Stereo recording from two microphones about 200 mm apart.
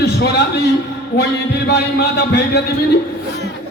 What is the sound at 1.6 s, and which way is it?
Speech, 55° left (ahead or behind).